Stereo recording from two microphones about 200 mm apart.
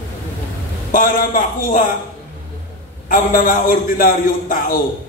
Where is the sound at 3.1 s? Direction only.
45° left (ahead or behind).